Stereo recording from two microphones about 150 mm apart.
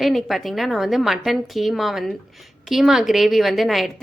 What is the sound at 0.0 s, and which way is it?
A woman's voice, centre (ahead or behind).